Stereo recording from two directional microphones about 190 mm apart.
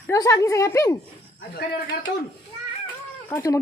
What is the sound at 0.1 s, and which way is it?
Speech, 20° left (ahead or behind).